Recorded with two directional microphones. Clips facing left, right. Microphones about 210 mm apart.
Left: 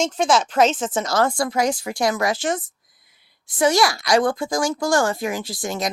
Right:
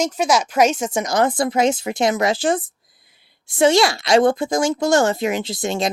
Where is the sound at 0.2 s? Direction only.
10° right (ahead or behind).